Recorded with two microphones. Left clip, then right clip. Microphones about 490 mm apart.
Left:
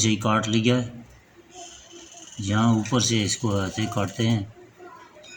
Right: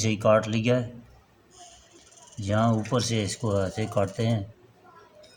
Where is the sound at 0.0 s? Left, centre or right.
Right.